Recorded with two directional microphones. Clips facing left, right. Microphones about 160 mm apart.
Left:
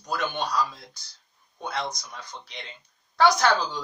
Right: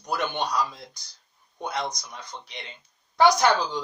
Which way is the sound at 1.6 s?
20° right (ahead or behind).